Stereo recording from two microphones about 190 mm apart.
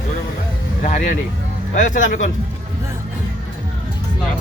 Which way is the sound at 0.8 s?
45° left (ahead or behind).